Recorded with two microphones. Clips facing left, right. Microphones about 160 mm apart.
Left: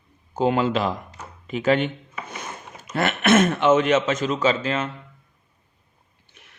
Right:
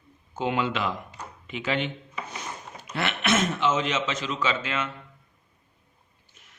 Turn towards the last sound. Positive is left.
turn(degrees=65)  # may be behind; listen again after turning